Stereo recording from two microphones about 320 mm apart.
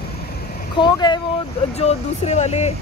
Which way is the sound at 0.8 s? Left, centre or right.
Centre.